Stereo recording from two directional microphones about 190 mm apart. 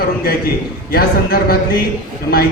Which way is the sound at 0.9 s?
50° left (ahead or behind).